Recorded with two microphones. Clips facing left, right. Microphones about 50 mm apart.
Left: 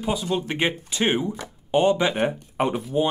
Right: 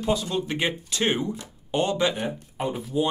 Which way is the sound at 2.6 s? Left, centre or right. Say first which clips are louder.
Left 6 dB; left.